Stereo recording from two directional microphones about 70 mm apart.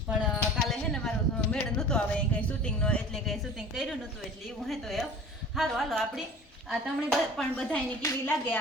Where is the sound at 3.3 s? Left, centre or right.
Centre.